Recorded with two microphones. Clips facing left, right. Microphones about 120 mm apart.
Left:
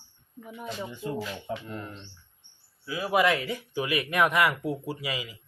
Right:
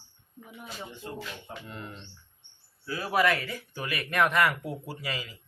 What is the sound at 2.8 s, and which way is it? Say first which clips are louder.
Speech: left 2 dB; 15° left (ahead or behind).